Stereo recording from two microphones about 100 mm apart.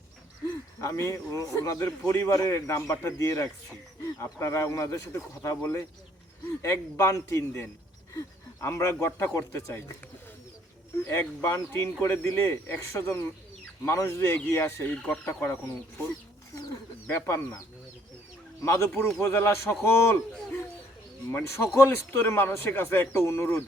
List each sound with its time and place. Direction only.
0.8 s a man's voice: 30° left (ahead or behind)
11.0 s speech: 25° left (ahead or behind)
14.8 s speech: 15° left (ahead or behind)
16.6 s bird: 30° left (ahead or behind)
18.6 s speech: 25° left (ahead or behind)
21.8 s speech: 25° left (ahead or behind)